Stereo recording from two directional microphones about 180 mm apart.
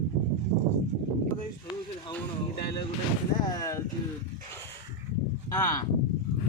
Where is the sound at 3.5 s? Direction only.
20° left (ahead or behind).